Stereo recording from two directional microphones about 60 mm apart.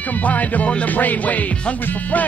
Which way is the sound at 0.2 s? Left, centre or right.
Left.